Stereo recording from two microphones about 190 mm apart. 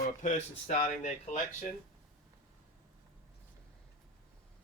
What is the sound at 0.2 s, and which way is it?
Speech, 40° left (ahead or behind).